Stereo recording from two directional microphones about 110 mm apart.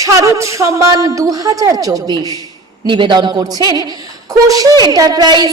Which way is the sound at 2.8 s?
45° right (ahead or behind).